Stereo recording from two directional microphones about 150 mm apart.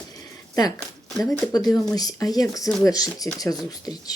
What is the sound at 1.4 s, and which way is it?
Speech, 25° left (ahead or behind).